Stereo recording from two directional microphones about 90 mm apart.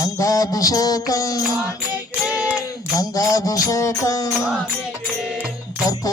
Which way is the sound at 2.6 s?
40° left (ahead or behind).